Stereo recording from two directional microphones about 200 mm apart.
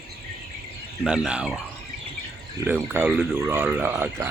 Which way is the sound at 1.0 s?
5° right (ahead or behind).